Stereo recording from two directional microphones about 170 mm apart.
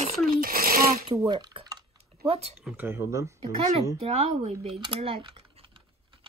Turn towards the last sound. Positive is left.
turn(degrees=-30)  # may be behind; listen again after turning